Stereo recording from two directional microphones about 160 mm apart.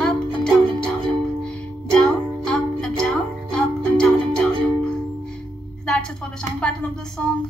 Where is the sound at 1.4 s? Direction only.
5° left (ahead or behind).